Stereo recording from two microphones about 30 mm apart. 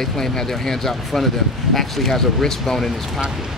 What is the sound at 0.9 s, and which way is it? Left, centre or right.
Speech, centre.